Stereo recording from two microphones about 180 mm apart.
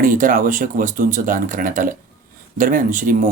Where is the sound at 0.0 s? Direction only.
50° right (ahead or behind).